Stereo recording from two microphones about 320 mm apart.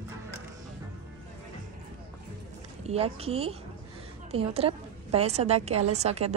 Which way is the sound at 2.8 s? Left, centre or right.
Centre.